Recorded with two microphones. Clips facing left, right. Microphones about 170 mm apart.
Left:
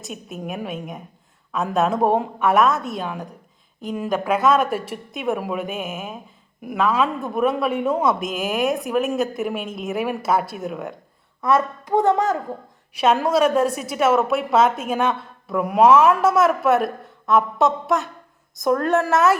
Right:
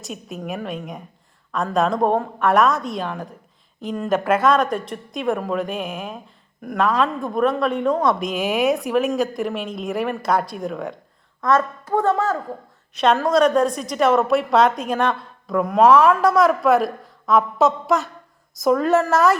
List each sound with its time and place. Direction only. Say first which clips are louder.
0.0 s a woman's voice: right 1 dB; centre (ahead or behind)